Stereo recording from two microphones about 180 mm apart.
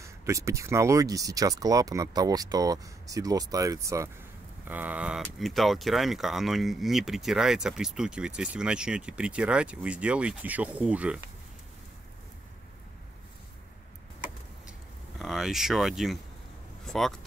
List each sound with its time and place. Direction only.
0.0 s speech: 15° right (ahead or behind)
15.1 s speech: centre (ahead or behind)